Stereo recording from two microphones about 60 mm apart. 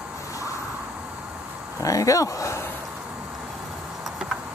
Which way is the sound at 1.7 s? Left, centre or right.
Left.